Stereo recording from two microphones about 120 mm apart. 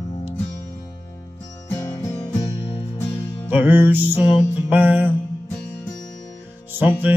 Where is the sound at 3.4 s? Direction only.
15° right (ahead or behind).